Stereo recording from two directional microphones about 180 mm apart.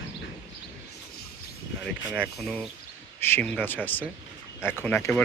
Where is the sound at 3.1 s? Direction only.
10° left (ahead or behind).